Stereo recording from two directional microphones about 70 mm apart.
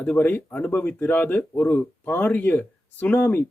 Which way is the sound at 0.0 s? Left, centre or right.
Left.